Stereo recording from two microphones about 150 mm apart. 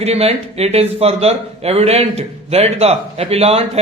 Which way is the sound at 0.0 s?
45° right (ahead or behind).